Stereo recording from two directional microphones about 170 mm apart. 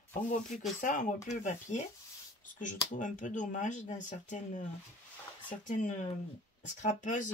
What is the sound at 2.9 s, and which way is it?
Speech, 45° left (ahead or behind).